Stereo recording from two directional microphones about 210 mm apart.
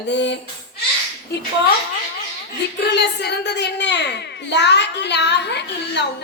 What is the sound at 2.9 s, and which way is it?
A woman's voice, 50° left (ahead or behind).